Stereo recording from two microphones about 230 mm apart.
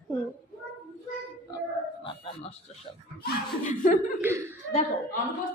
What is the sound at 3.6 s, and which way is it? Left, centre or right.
Speech, left.